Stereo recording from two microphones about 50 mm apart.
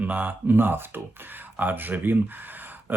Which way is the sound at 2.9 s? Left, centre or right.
Right.